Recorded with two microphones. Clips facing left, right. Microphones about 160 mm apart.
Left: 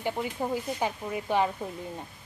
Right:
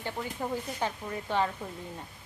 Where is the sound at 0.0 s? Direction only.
15° left (ahead or behind).